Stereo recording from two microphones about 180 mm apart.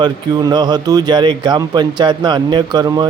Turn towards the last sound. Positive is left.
turn(degrees=-20)  # may be behind; listen again after turning